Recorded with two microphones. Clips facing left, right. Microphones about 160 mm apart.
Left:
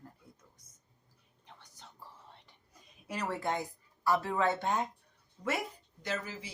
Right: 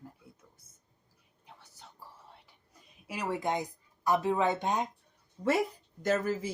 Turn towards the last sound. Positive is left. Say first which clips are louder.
# right 9 dB
turn(degrees=-45)  # may be behind; listen again after turning